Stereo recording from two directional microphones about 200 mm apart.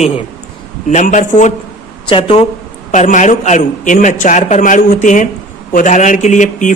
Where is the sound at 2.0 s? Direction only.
25° left (ahead or behind).